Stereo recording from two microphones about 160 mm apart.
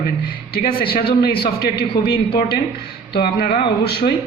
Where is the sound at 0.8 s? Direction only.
75° left (ahead or behind).